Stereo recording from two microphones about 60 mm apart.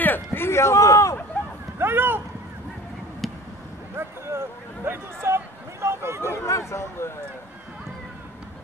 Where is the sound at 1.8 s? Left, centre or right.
Right.